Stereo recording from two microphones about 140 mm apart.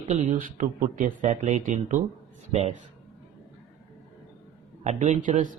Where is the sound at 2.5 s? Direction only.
50° right (ahead or behind).